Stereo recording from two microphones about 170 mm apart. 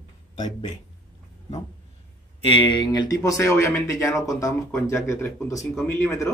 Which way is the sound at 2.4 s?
30° left (ahead or behind).